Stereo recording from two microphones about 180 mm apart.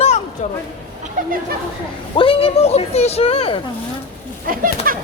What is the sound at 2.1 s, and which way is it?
Speech, 30° left (ahead or behind).